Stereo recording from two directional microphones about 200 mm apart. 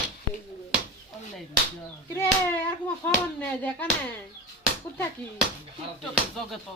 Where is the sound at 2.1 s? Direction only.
10° left (ahead or behind).